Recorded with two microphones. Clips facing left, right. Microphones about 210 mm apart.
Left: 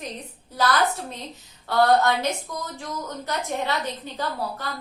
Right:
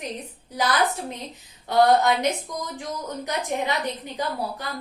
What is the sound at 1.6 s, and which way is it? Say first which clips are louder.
A woman's voice: right 1 dB; 15° right (ahead or behind).